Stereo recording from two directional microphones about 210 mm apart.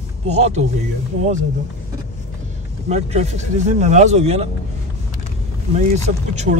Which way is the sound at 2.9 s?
30° right (ahead or behind).